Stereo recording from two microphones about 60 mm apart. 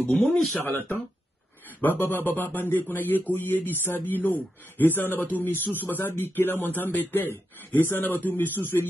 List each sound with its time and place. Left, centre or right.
0.6 s a man's voice: left